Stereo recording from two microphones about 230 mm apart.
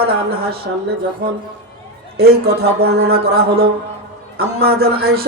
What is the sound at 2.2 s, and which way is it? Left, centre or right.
A man's voice, right.